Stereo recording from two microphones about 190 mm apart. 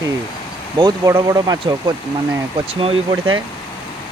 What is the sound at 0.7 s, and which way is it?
Speech, 20° right (ahead or behind).